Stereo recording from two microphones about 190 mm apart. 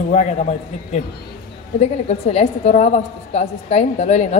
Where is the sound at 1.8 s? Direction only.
35° left (ahead or behind).